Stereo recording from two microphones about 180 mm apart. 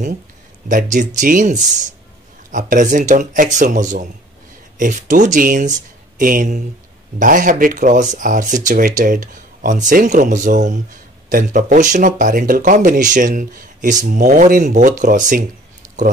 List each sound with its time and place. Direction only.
0.7 s speech: 45° right (ahead or behind)